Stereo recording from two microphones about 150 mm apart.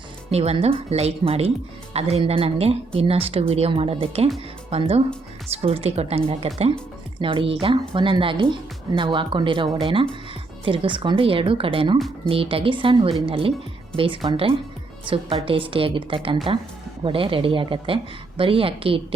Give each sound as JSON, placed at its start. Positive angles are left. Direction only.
{"t": 0.3, "sound": "a woman's voice", "side_deg": -45}
{"t": 11.9, "sound": "speech", "side_deg": 0}
{"t": 12.3, "sound": "a woman's voice", "side_deg": -40}